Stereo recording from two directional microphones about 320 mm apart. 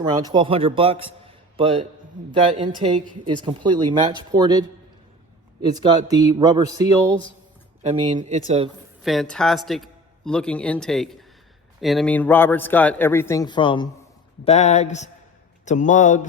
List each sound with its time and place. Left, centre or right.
0.0 s speech: centre
5.6 s speech: centre
9.0 s a man's voice: centre; by 16.2 s left